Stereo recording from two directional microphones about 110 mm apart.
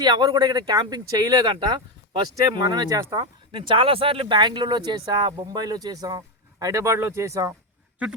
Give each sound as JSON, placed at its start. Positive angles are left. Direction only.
{"t": 0.0, "sound": "speech", "side_deg": -40}
{"t": 3.2, "sound": "speech", "side_deg": -50}